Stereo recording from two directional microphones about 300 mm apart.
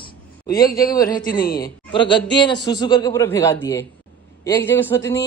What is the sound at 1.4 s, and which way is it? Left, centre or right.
Speech, left.